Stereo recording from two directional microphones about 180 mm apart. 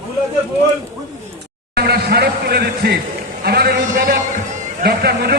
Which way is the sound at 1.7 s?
60° right (ahead or behind).